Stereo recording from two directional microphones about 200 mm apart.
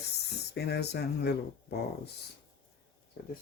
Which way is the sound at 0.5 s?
55° left (ahead or behind).